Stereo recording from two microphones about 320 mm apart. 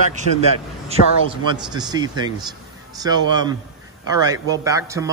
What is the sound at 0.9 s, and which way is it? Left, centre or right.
A man's voice, centre.